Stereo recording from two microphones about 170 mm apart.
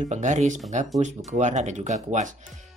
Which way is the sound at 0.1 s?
45° right (ahead or behind).